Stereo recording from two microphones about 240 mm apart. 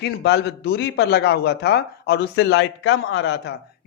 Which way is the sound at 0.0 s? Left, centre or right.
Left.